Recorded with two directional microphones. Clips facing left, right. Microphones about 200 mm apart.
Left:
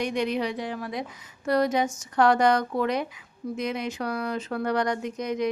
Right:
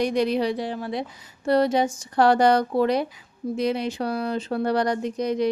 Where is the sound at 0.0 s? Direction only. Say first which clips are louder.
Right 4 dB; 35° right (ahead or behind).